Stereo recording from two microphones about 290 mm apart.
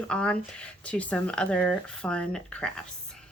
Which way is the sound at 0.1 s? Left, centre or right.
Centre.